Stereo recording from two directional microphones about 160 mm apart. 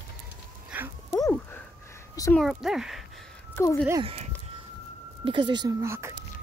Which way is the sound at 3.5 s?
15° left (ahead or behind).